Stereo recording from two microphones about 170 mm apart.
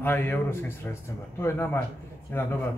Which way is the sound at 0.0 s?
10° left (ahead or behind).